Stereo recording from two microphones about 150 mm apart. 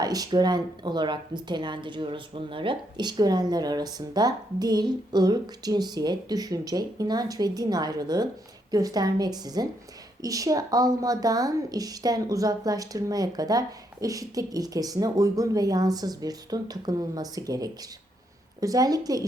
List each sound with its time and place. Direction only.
0.0 s speech: 25° right (ahead or behind)